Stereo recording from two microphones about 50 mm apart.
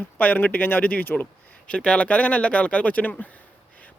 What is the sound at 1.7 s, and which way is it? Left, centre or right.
Speech, left.